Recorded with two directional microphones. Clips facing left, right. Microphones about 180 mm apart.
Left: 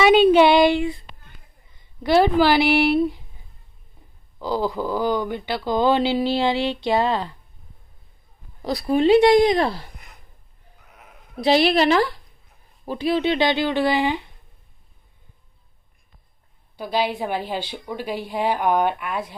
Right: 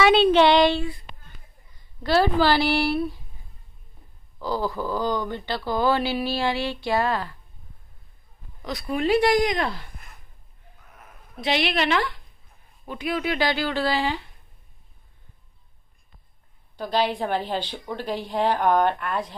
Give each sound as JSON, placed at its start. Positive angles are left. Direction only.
{"t": 0.0, "sound": "a sound", "side_deg": 10}
{"t": 2.0, "sound": "a woman's voice", "side_deg": 15}
{"t": 4.4, "sound": "speech", "side_deg": 15}
{"t": 8.6, "sound": "speech", "side_deg": 30}
{"t": 11.4, "sound": "a woman's voice", "side_deg": 35}
{"t": 16.7, "sound": "a woman's voice", "side_deg": 10}